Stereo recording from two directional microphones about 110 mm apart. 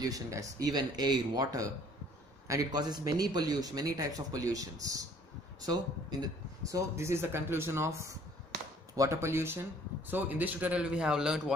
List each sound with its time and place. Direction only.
0.0 s a man's voice: 30° right (ahead or behind); by 11.5 s 5° right (ahead or behind)